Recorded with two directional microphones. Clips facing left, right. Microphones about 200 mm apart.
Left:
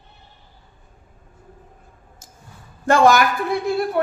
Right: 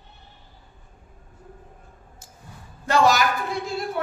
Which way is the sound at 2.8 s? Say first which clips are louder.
Left 5 dB; 50° left (ahead or behind).